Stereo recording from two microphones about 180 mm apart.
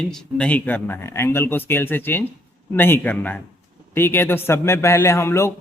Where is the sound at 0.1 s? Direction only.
5° left (ahead or behind).